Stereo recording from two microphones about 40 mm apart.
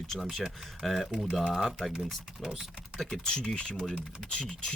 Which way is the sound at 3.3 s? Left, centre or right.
Left.